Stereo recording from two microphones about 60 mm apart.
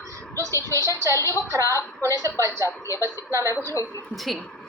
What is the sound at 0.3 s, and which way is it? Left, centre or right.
A woman's voice, right.